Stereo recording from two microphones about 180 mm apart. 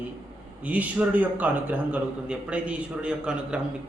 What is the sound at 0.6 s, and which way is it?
A man's voice, 10° right (ahead or behind).